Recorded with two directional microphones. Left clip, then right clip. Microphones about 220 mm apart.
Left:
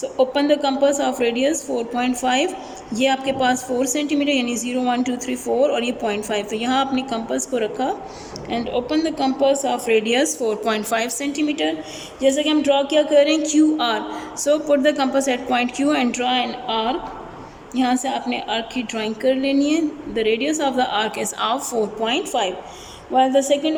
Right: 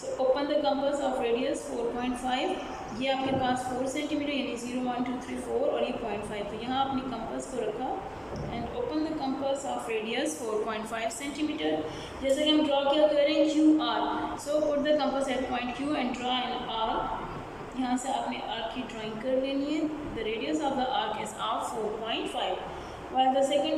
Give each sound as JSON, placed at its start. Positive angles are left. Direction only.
{"t": 0.3, "sound": "a woman's voice", "side_deg": 50}
{"t": 8.4, "sound": "a woman's voice", "side_deg": 50}